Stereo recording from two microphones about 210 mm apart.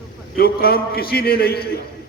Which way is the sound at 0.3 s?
45° left (ahead or behind).